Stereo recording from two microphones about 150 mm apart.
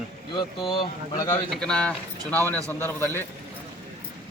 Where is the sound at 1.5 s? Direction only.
5° left (ahead or behind).